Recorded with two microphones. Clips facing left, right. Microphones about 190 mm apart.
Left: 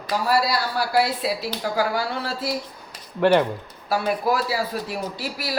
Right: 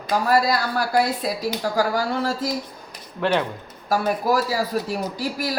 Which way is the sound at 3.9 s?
45° right (ahead or behind).